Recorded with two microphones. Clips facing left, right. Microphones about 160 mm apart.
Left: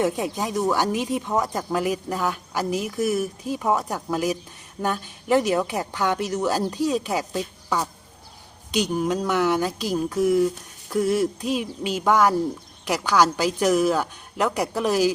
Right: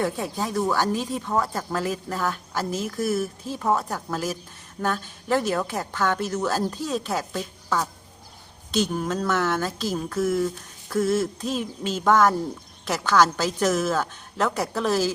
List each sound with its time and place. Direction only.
0.0 s speech: 15° left (ahead or behind)